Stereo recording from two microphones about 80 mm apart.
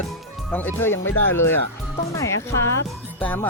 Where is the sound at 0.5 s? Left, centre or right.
Left.